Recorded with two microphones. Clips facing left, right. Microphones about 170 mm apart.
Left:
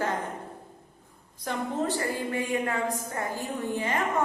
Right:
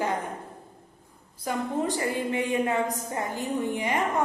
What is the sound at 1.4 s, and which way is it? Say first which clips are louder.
A woman's voice: right 2 dB; 10° right (ahead or behind).